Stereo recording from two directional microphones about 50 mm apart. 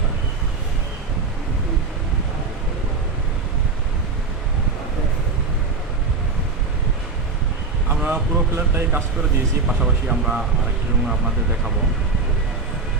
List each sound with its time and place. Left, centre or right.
8.0 s speech: right
8.7 s speech: right
9.6 s speech: centre